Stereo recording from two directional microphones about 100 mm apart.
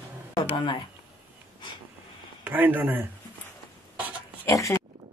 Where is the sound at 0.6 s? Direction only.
55° left (ahead or behind).